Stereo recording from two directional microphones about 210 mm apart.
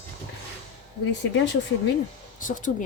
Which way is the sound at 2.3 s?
40° left (ahead or behind).